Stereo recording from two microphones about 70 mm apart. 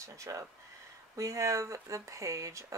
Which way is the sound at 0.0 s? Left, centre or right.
Right.